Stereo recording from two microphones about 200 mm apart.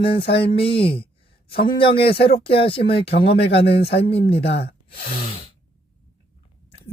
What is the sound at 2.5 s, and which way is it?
Speech, 25° left (ahead or behind).